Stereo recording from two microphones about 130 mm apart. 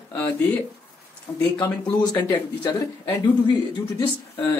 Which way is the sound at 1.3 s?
20° left (ahead or behind).